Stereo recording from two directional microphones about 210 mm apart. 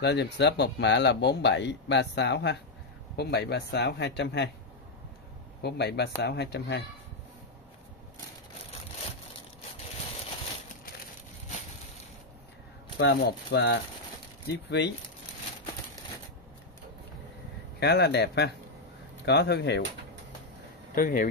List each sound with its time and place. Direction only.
0.0 s speech: 55° left (ahead or behind)
5.6 s speech: 50° left (ahead or behind)
13.0 s speech: 50° left (ahead or behind)
17.7 s speech: 50° left (ahead or behind)
20.9 s speech: 40° left (ahead or behind)